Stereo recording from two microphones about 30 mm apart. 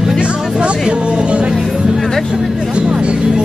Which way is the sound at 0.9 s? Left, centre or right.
Right.